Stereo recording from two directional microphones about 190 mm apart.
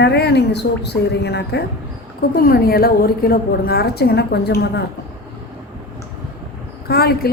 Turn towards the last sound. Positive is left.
turn(degrees=55)  # may be behind; listen again after turning